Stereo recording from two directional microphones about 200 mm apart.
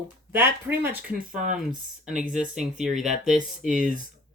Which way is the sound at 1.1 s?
40° right (ahead or behind).